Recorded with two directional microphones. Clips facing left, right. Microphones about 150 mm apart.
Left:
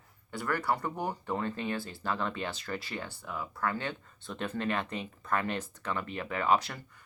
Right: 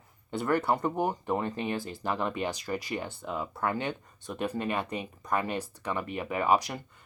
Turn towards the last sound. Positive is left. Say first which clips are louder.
# right 2 dB
turn(degrees=-15)  # may be behind; listen again after turning